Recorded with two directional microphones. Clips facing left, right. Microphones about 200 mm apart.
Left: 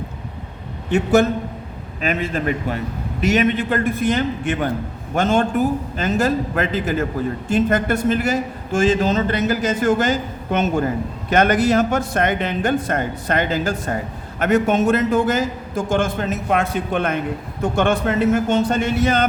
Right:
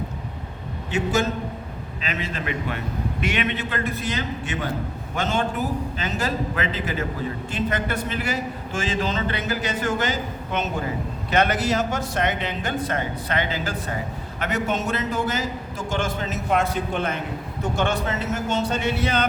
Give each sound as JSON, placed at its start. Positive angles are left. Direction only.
{"t": 0.9, "sound": "a man's voice", "side_deg": 60}